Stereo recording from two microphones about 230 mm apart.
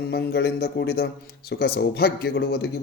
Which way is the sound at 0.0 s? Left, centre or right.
Left.